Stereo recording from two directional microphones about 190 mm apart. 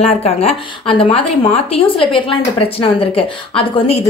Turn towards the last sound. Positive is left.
turn(degrees=30)  # may be behind; listen again after turning